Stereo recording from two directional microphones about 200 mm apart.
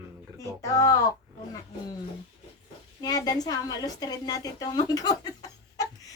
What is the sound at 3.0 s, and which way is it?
A woman's voice, 20° left (ahead or behind).